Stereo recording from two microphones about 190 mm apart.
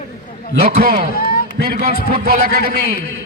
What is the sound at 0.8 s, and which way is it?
Speech, 50° right (ahead or behind).